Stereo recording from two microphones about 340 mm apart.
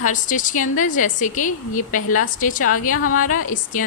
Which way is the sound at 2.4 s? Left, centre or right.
Left.